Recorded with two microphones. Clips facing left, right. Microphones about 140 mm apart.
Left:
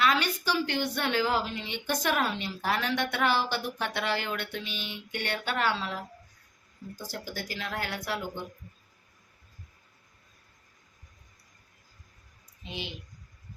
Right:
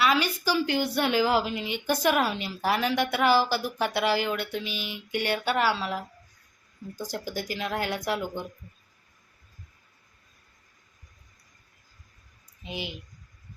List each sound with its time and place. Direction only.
0.0 s a woman's voice: 10° right (ahead or behind)
12.6 s a woman's voice: 10° right (ahead or behind)